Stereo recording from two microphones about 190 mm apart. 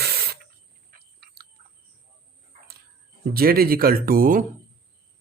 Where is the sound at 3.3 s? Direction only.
50° right (ahead or behind).